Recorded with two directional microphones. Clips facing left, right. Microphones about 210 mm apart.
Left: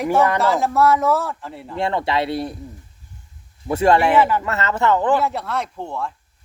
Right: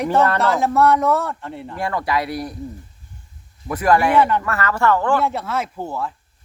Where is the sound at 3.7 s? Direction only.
25° left (ahead or behind).